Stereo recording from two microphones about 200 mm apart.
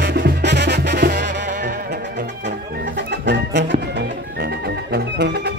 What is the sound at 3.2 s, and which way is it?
Music, 65° right (ahead or behind).